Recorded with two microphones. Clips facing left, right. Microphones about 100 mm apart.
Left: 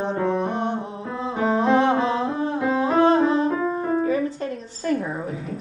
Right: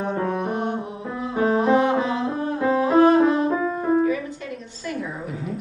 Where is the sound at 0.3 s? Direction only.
30° left (ahead or behind).